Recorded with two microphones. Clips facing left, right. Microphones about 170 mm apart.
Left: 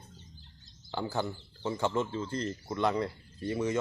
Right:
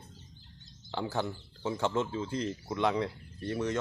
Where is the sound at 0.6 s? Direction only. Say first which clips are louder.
Even; centre (ahead or behind).